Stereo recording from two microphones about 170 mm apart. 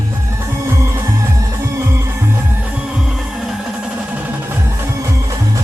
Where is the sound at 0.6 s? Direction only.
15° right (ahead or behind).